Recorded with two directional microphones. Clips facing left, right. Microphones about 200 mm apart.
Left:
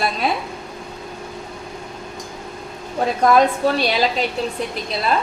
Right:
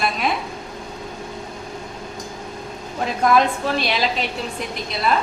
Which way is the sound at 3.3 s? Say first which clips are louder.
Left 3 dB; 40° left (ahead or behind).